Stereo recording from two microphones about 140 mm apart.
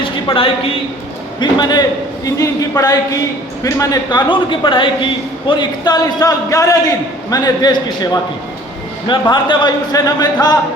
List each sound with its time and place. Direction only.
0.0 s a woman's voice: 40° left (ahead or behind)
1.4 s a man's voice: 30° left (ahead or behind)
4.3 s a man's voice: 35° left (ahead or behind)